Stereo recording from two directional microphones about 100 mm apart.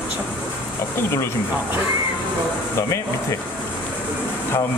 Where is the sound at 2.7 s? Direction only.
30° left (ahead or behind).